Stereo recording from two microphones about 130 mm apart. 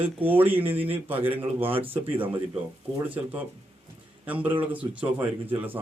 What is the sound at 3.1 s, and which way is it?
A man's voice, 15° right (ahead or behind).